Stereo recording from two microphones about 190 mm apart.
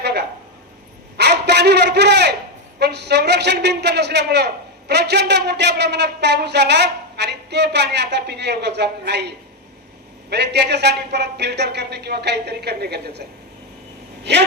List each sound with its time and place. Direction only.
0.0 s a sound: 60° right (ahead or behind)
2.7 s a man's voice: 60° right (ahead or behind)
14.3 s a man's voice: 65° right (ahead or behind)